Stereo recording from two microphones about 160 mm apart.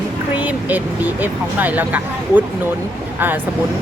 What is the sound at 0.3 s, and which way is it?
Speech, 10° right (ahead or behind).